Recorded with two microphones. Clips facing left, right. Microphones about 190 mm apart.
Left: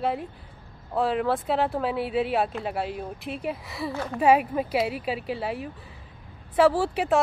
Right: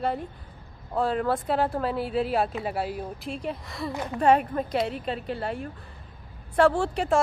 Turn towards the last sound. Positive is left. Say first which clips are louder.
# left 1 dB
turn(degrees=5)  # may be behind; listen again after turning